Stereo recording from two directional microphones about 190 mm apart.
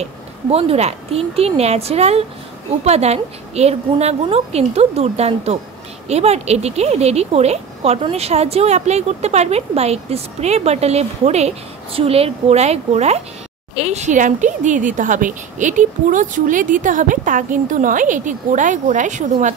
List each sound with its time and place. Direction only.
0.0 s speech: 30° right (ahead or behind)